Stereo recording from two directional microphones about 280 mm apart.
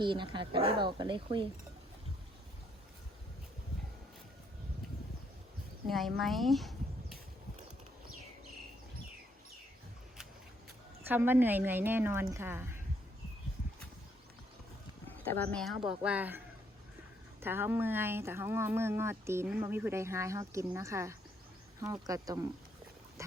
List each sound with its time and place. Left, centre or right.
0.0 s speech: centre
5.9 s speech: centre
11.1 s speech: centre
15.2 s speech: centre
17.4 s speech: centre